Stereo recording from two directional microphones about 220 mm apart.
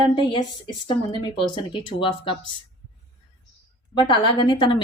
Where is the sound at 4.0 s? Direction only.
20° left (ahead or behind).